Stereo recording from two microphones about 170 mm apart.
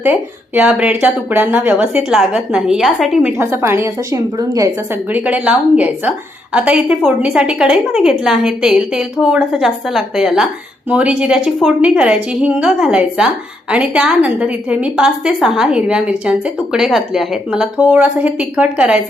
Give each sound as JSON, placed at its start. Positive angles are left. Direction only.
{"t": 0.0, "sound": "speech", "side_deg": -10}
{"t": 5.1, "sound": "a woman's voice", "side_deg": -10}